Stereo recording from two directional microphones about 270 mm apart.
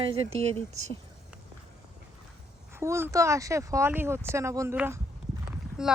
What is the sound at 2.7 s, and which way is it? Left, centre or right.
Speech, centre.